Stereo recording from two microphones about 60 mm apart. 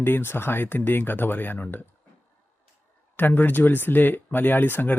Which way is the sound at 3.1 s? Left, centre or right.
Left.